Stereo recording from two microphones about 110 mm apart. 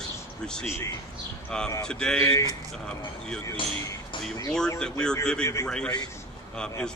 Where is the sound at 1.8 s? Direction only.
5° left (ahead or behind).